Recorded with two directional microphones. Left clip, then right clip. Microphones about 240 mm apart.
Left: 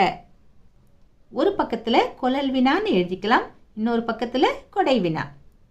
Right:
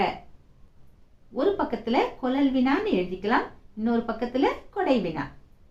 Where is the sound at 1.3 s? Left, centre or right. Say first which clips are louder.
Left 3 dB; left.